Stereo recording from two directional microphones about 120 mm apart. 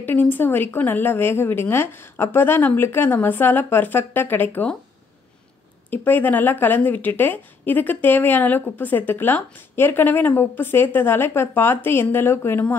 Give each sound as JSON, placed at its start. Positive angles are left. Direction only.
{"t": 0.0, "sound": "a woman's voice", "side_deg": 15}
{"t": 5.9, "sound": "a woman's voice", "side_deg": 15}